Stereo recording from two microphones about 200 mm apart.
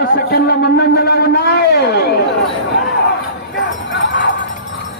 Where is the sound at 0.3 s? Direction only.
50° left (ahead or behind).